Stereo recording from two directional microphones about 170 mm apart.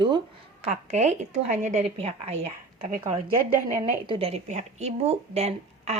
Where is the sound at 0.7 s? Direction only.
40° right (ahead or behind).